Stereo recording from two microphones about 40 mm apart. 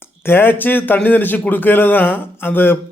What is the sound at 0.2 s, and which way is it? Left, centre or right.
A man's voice, left.